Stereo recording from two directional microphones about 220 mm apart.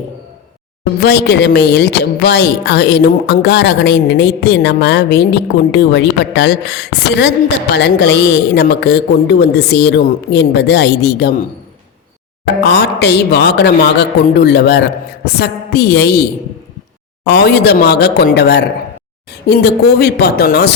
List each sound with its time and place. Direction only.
0.9 s speech: 50° left (ahead or behind)
12.6 s speech: 50° left (ahead or behind)
17.2 s speech: 50° left (ahead or behind)